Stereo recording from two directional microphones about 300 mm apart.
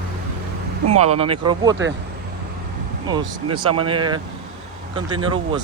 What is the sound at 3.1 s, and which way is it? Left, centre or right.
Speech, centre.